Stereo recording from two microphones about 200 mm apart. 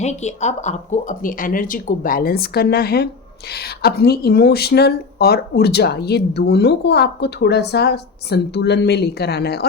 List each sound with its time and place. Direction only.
0.0 s speech: 35° left (ahead or behind); by 9.6 s 55° left (ahead or behind)